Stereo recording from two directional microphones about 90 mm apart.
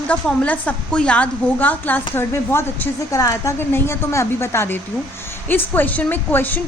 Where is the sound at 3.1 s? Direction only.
35° left (ahead or behind).